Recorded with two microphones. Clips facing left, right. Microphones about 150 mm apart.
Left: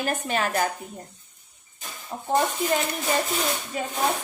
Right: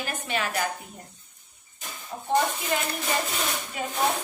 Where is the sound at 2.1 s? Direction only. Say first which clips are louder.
Left 3 dB; 40° left (ahead or behind).